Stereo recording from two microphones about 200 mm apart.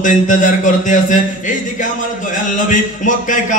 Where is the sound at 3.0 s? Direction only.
40° left (ahead or behind).